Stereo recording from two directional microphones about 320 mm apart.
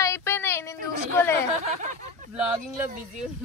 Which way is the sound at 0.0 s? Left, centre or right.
Centre.